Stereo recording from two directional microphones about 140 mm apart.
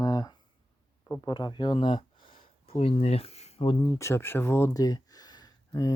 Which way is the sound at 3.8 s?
20° left (ahead or behind).